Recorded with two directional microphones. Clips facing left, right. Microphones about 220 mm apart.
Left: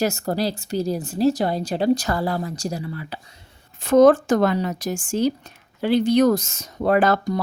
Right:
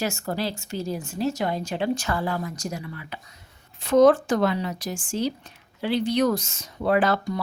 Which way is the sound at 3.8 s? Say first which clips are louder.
Left 3 dB; 45° left (ahead or behind).